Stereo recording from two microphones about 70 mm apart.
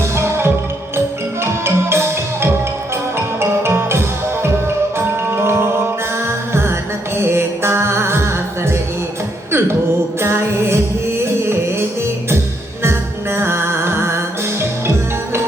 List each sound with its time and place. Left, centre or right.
0.2 s music: right